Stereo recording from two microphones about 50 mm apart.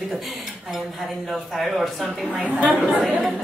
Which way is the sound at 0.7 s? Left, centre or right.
Centre.